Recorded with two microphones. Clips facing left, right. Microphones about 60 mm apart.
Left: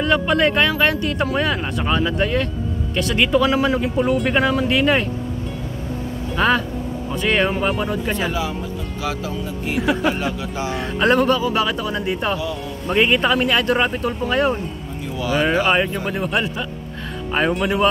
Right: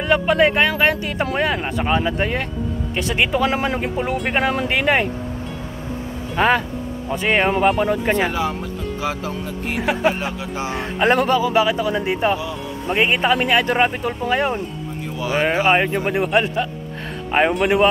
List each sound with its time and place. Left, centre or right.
0.0 s speech: centre; by 3.9 s right
3.9 s speech: right
6.3 s speech: right
7.9 s speech: right
17.3 s speech: right